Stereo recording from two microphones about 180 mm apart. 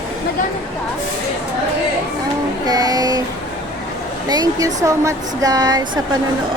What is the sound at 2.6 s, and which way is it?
Speech, 20° right (ahead or behind).